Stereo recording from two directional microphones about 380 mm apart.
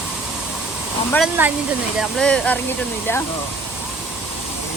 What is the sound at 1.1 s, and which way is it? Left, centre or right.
Speech, centre.